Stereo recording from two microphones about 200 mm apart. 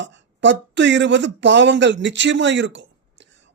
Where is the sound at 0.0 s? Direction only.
65° right (ahead or behind).